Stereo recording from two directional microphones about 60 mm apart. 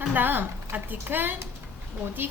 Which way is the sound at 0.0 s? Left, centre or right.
Right.